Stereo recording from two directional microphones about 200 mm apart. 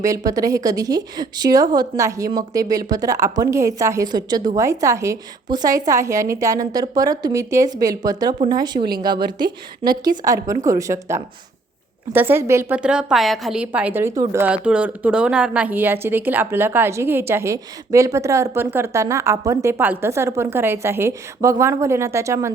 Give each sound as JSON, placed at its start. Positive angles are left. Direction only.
{"t": 0.3, "sound": "a woman's voice", "side_deg": -15}